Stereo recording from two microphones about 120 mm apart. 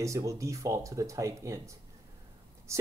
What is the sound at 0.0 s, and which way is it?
Speech, 25° right (ahead or behind).